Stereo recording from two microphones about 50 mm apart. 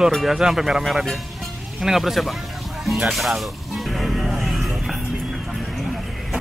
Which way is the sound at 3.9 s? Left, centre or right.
Centre.